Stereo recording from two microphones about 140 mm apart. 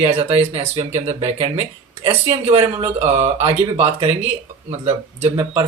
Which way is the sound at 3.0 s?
55° right (ahead or behind).